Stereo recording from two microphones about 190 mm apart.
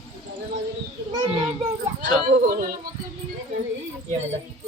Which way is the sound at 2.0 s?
50° right (ahead or behind).